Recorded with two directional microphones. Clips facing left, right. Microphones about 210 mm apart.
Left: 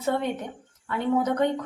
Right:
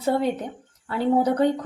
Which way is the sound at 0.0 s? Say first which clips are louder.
Right 4 dB; 35° right (ahead or behind).